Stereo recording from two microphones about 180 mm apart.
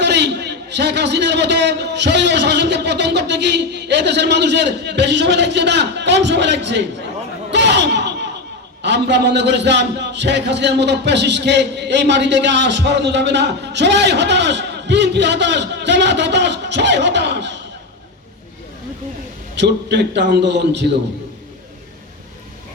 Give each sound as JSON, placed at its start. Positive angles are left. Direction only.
{"t": 0.0, "sound": "a man's voice", "side_deg": -70}
{"t": 7.5, "sound": "chatter", "side_deg": -75}
{"t": 8.8, "sound": "a man's voice", "side_deg": -75}
{"t": 19.5, "sound": "a man's voice", "side_deg": -70}